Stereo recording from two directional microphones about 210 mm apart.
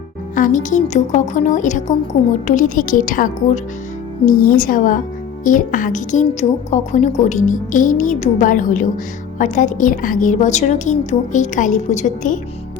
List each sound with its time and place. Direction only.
0.3 s a woman's voice: 35° left (ahead or behind)